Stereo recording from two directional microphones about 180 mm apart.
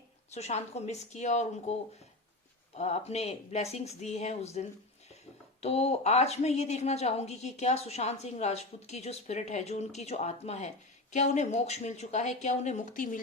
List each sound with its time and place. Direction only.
0.3 s a woman's voice: 35° left (ahead or behind)
2.7 s a woman's voice: 35° left (ahead or behind)